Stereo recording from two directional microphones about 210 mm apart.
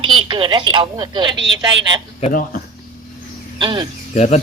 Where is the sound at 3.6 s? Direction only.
20° right (ahead or behind).